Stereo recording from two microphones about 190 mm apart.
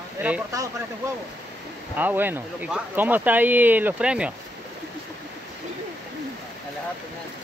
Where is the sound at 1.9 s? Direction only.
10° right (ahead or behind).